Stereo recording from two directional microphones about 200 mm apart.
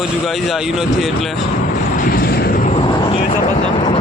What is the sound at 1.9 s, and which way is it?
Vehicle, 45° left (ahead or behind).